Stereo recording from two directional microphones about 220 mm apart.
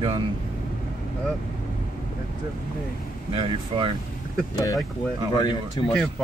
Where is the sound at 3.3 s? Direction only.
25° right (ahead or behind).